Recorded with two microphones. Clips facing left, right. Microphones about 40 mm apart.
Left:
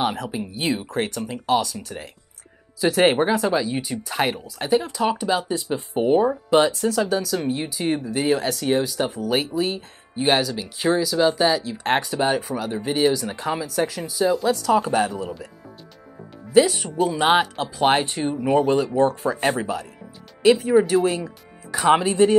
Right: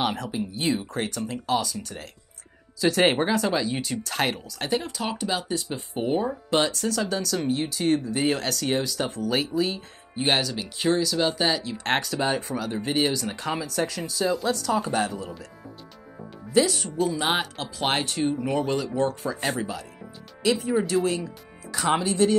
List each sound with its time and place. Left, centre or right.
0.0 s speech: centre
5.5 s speech: left
5.9 s speech: centre
9.8 s speech: centre
12.0 s speech: centre
12.7 s speech: centre
13.1 s speech: centre
16.5 s speech: left
18.8 s speech: left